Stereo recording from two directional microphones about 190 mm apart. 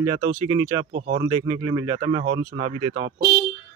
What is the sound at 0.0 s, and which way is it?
Speech, 25° right (ahead or behind).